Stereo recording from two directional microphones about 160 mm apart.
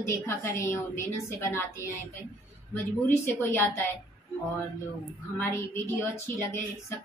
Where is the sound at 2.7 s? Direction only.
15° left (ahead or behind).